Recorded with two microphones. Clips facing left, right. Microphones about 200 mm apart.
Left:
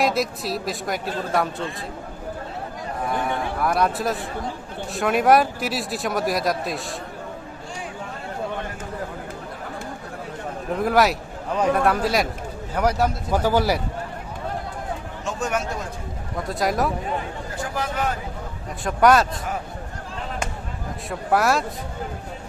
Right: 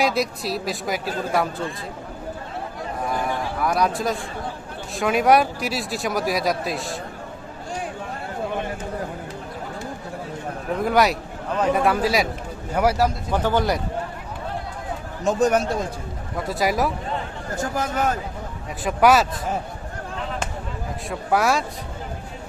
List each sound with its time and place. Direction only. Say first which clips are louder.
0.0 s speech: even; centre (ahead or behind)
3.1 s speech: left 1 dB; centre (ahead or behind)
10.8 s a man's voice: even; centre (ahead or behind)
13.3 s a man's voice: left 4 dB; 10° left (ahead or behind)
15.2 s speech: right 8 dB; 40° right (ahead or behind)
16.5 s speech: right 1 dB; 5° right (ahead or behind)
17.5 s a man's voice: right 4 dB; 45° right (ahead or behind)
18.9 s speech: even; 5° right (ahead or behind)
21.1 s speech: even; centre (ahead or behind)